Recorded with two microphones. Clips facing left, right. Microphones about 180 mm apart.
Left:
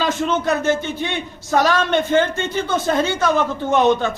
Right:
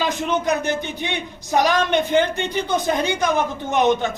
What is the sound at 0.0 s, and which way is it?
Speech, 15° right (ahead or behind).